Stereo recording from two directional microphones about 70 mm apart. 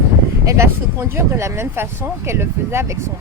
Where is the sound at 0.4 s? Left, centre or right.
Right.